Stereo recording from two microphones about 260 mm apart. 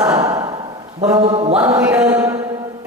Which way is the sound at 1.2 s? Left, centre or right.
Right.